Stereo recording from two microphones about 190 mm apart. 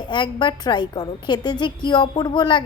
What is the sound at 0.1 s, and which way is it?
A woman's voice, 25° left (ahead or behind).